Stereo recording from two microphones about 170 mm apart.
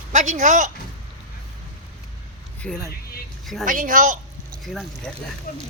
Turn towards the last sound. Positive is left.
turn(degrees=55)  # may be behind; listen again after turning